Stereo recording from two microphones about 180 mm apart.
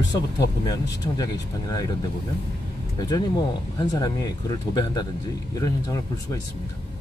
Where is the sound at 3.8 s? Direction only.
20° left (ahead or behind).